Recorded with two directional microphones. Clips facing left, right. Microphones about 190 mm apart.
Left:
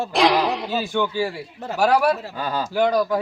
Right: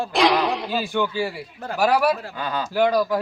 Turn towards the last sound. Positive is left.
turn(degrees=-5)  # may be behind; listen again after turning